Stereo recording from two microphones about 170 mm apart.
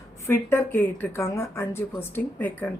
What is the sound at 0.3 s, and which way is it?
Speech, 15° left (ahead or behind).